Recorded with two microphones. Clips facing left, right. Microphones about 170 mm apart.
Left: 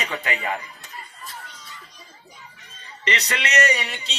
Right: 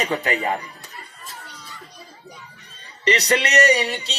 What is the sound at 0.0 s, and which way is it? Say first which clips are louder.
Speech: right 5 dB; 40° right (ahead or behind).